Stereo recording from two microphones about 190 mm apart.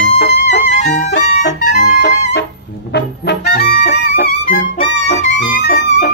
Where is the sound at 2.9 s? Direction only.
60° left (ahead or behind).